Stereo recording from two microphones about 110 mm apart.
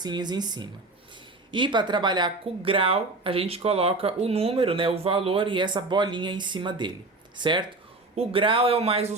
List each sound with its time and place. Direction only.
0.0 s speech: 40° right (ahead or behind); by 9.1 s 65° right (ahead or behind)